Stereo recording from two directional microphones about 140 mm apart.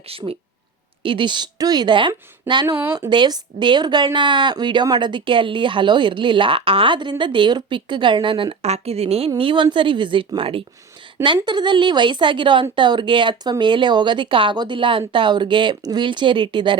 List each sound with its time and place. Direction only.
0.1 s a woman's voice: 45° right (ahead or behind)